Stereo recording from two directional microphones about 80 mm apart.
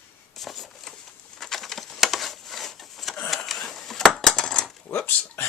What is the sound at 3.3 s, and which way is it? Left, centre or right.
Coin, centre.